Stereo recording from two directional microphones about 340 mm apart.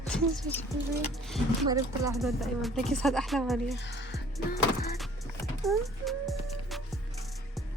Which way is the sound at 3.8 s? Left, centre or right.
Left.